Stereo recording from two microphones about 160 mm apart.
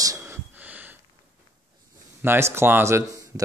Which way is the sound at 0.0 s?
20° right (ahead or behind).